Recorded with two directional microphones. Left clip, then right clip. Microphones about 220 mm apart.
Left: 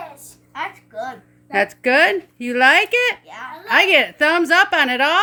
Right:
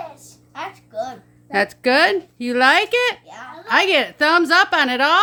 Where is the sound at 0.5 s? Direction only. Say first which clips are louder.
Even; 20° right (ahead or behind).